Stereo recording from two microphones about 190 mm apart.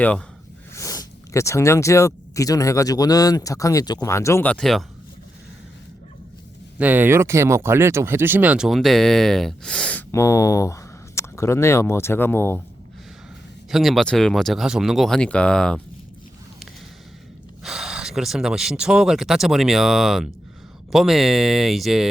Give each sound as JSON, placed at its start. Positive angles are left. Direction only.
{"t": 0.7, "sound": "speech", "side_deg": 15}
{"t": 6.7, "sound": "speech", "side_deg": -10}
{"t": 10.1, "sound": "speech", "side_deg": 15}
{"t": 13.7, "sound": "speech", "side_deg": 0}
{"t": 17.6, "sound": "speech", "side_deg": -5}